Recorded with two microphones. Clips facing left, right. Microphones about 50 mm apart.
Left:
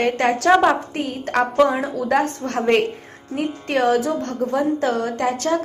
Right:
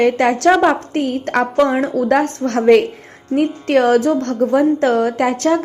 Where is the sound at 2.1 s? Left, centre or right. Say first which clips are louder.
Right 1 dB; right.